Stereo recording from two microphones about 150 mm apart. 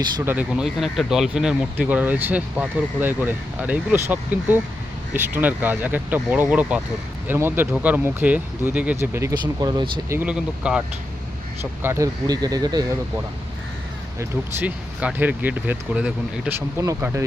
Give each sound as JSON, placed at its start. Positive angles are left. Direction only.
{"t": 0.3, "sound": "speech", "side_deg": -10}
{"t": 10.1, "sound": "speech", "side_deg": -10}
{"t": 14.2, "sound": "speech", "side_deg": -10}